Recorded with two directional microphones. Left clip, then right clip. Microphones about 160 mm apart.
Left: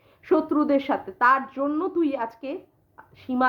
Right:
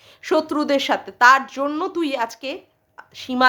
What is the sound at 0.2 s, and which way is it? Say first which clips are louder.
Speech: right 2 dB; 20° right (ahead or behind).